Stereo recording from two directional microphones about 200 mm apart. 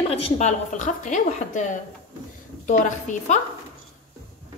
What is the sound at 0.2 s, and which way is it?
A woman's voice, 35° left (ahead or behind).